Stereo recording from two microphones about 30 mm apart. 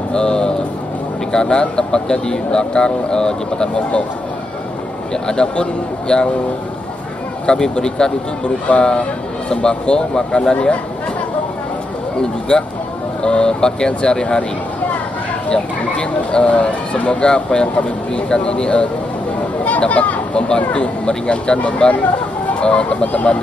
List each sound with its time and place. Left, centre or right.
0.1 s speech: left
5.1 s speech: left
7.4 s speech: left
8.7 s speech: left
9.5 s speech: left
12.2 s speech: left
15.5 s speech: left
17.2 s speech: left
17.8 s speech: left
19.9 s speech: left
20.3 s speech: left
21.5 s speech: left